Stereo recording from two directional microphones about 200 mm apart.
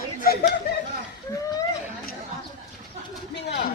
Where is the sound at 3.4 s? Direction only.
55° left (ahead or behind).